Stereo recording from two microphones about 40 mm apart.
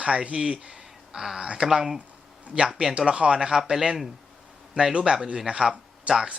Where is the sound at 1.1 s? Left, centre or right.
Centre.